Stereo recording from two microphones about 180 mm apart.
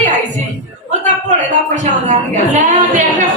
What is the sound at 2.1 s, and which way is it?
Speech, 45° right (ahead or behind).